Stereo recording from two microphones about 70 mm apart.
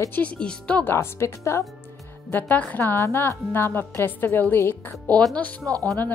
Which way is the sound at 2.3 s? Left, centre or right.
Left.